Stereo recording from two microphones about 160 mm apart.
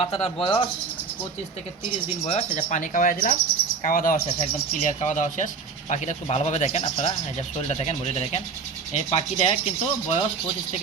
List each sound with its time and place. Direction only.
0.0 s rub: 40° left (ahead or behind)
2.2 s speech: 45° left (ahead or behind)
6.8 s rub: 40° left (ahead or behind)